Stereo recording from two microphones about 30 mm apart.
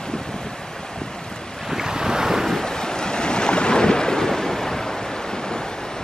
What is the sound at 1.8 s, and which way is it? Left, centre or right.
Waves, centre.